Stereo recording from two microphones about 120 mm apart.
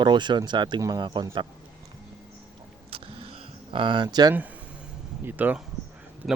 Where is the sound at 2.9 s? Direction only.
50° right (ahead or behind); by 4.3 s 35° right (ahead or behind).